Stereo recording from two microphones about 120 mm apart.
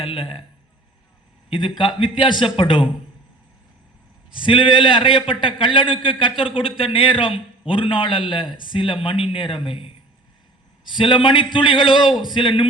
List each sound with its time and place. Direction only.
0.0 s a man's voice: 50° left (ahead or behind)
1.5 s a man's voice: 45° left (ahead or behind)
4.4 s a man's voice: 45° left (ahead or behind)
11.9 s a man's voice: 5° right (ahead or behind)
12.3 s a man's voice: 45° left (ahead or behind)